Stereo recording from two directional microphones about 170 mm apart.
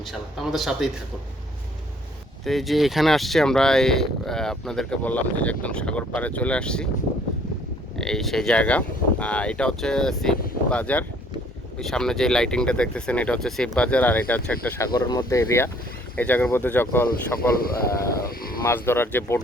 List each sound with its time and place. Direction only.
0.0 s speech: centre (ahead or behind)
2.4 s speech: centre (ahead or behind)
7.9 s speech: 5° left (ahead or behind)
14.9 s speech: 20° left (ahead or behind)
17.6 s speech: 60° left (ahead or behind)
18.3 s a sound: 60° left (ahead or behind)
18.6 s speech: 15° left (ahead or behind)